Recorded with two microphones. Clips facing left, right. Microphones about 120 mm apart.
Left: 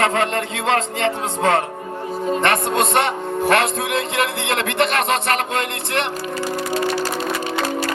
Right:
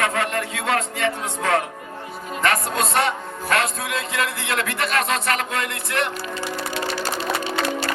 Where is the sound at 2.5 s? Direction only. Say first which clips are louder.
Left 1 dB; 60° left (ahead or behind).